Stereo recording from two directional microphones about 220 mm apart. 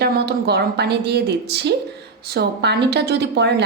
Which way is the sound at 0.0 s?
45° right (ahead or behind).